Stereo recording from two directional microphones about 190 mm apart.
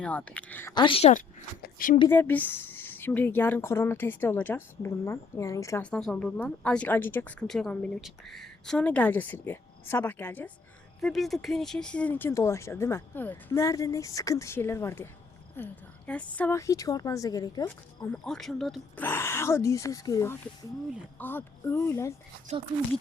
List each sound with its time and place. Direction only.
0.0 s a woman's voice: 5° left (ahead or behind)
0.7 s speech: 25° left (ahead or behind)
1.6 s a sound: 45° left (ahead or behind)
2.0 s a woman's voice: 10° left (ahead or behind)
18.0 s speech: centre (ahead or behind)
19.0 s a woman's voice: 10° left (ahead or behind)